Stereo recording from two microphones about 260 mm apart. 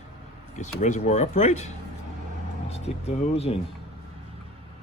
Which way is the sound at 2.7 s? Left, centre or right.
Left.